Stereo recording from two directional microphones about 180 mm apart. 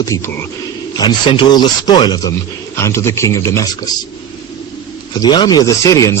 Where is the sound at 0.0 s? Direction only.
15° left (ahead or behind).